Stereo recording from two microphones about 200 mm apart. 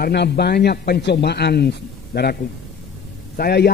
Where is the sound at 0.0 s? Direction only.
55° left (ahead or behind).